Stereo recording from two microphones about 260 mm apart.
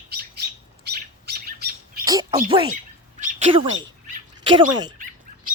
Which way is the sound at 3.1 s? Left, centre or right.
Right.